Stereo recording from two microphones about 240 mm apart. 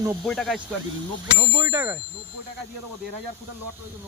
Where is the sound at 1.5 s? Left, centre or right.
Centre.